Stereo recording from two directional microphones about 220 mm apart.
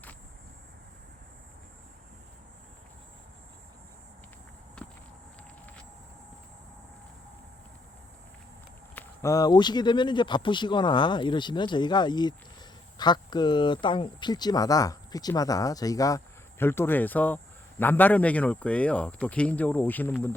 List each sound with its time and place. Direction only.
9.0 s speech: 15° left (ahead or behind)